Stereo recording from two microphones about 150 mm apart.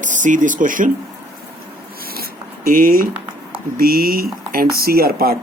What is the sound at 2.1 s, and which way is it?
Zipper, 80° right.